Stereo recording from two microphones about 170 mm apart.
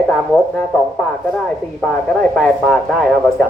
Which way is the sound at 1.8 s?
5° left (ahead or behind).